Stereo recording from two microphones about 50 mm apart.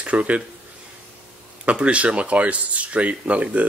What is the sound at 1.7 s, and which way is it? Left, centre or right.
Speech, right.